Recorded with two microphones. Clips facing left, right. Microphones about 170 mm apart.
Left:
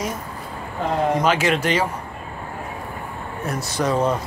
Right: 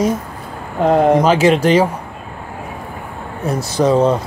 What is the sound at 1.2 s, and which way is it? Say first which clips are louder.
Speech: right 7 dB; 30° right (ahead or behind).